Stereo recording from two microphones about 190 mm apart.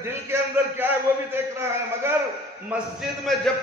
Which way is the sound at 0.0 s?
15° right (ahead or behind).